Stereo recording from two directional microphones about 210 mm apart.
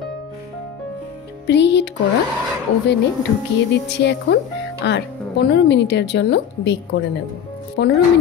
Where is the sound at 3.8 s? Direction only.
55° left (ahead or behind).